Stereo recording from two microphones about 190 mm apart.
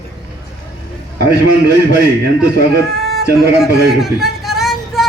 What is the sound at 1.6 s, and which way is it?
Speech, 60° right (ahead or behind).